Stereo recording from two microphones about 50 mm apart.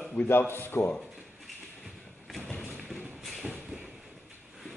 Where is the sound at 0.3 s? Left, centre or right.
Left.